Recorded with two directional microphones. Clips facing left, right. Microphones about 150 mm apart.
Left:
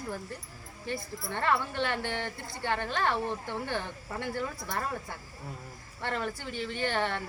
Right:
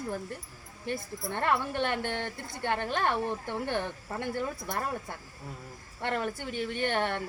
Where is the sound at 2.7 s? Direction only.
15° right (ahead or behind).